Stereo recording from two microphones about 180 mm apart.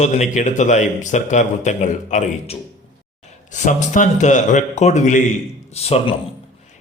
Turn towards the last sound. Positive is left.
turn(degrees=35)  # may be behind; listen again after turning